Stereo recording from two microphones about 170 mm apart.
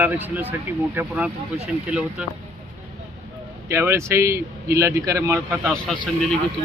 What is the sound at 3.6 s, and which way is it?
Speech, 15° right (ahead or behind).